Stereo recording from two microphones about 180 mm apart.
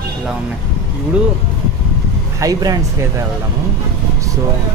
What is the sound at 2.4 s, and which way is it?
Speech, 20° right (ahead or behind).